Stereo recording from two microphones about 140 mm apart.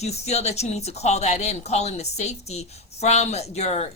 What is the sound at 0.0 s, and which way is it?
Speech, 50° left (ahead or behind).